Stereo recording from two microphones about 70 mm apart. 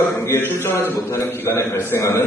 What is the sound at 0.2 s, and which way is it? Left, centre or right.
A man's voice, left.